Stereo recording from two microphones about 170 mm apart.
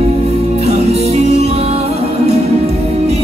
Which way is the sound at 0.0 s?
40° right (ahead or behind).